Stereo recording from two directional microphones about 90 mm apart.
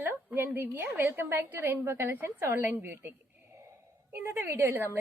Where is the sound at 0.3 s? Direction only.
25° right (ahead or behind).